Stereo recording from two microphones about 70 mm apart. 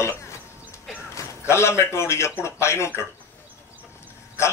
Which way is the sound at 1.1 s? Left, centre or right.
Left.